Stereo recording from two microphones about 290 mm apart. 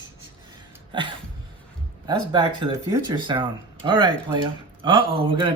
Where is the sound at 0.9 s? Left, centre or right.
Centre.